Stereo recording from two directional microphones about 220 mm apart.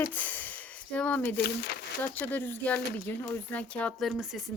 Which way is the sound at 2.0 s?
10° left (ahead or behind).